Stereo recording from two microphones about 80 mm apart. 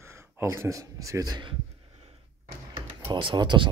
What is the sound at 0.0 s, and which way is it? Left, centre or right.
Speech, right.